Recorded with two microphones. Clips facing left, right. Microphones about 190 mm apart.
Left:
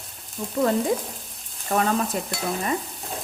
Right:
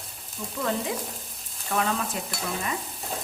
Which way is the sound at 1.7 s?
40° left (ahead or behind).